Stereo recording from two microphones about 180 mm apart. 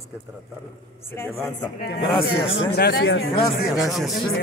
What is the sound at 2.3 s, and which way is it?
Speech, 90° left.